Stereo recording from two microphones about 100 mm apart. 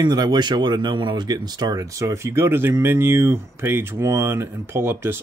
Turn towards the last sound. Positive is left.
turn(degrees=-25)  # may be behind; listen again after turning